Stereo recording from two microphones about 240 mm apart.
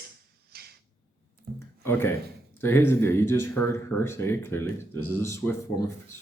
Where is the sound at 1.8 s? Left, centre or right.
Centre.